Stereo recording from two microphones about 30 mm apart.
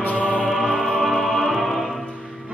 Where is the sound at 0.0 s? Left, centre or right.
Left.